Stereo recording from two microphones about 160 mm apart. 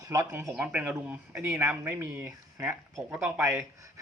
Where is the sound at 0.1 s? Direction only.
15° right (ahead or behind).